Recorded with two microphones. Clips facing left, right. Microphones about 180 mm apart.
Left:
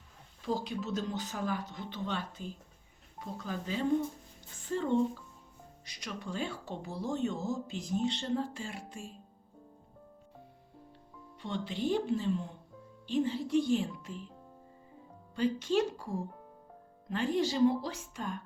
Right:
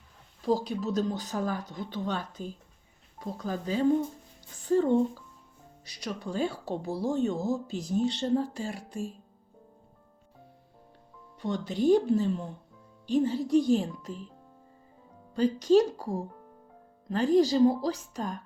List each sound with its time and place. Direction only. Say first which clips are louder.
0.4 s speech: right 7 dB; 40° right (ahead or behind)
11.3 s speech: right 6 dB; 40° right (ahead or behind)
15.4 s speech: right 7 dB; 40° right (ahead or behind)